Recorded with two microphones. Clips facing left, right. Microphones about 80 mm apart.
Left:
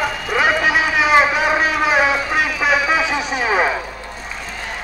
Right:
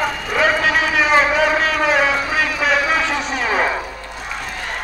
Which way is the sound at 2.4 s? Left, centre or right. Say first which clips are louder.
Even; centre.